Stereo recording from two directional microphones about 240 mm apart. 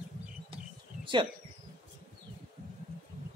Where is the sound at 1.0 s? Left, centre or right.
Right.